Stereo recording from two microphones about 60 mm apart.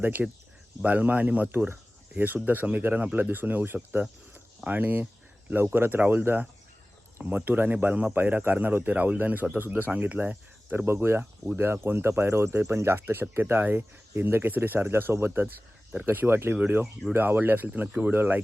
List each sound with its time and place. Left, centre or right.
0.0 s speech: right
10.8 s speech: right